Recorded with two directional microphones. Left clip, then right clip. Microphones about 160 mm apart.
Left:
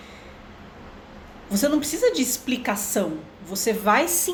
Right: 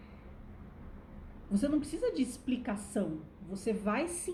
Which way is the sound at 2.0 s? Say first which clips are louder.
Left 14 dB; 50° left (ahead or behind).